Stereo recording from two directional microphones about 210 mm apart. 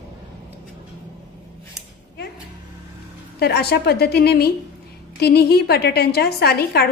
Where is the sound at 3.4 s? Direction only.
50° left (ahead or behind).